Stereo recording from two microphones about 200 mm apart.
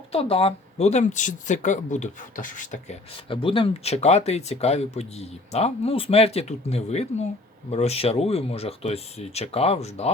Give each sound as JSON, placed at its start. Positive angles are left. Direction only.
{"t": 0.1, "sound": "speech", "side_deg": 30}
{"t": 3.2, "sound": "speech", "side_deg": 25}